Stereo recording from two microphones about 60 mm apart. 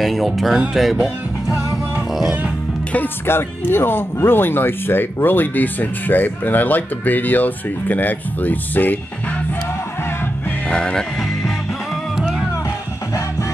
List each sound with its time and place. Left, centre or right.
0.0 s speech: centre
3.3 s speech: left
10.7 s speech: centre
12.2 s music: centre